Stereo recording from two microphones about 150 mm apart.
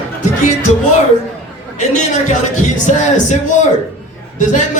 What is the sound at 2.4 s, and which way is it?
Speech, 50° left (ahead or behind).